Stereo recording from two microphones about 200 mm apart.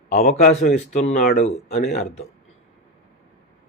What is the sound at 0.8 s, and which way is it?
Speech, 35° left (ahead or behind).